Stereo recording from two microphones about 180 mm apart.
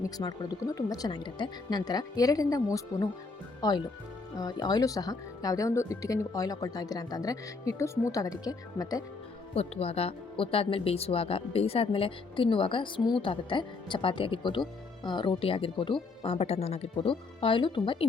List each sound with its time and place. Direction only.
0.0 s speech: 20° left (ahead or behind)
9.6 s speech: 35° left (ahead or behind)